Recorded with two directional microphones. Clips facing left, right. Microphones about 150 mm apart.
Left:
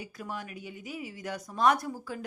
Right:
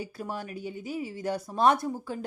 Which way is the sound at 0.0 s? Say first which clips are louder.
Right 4 dB; 30° right (ahead or behind).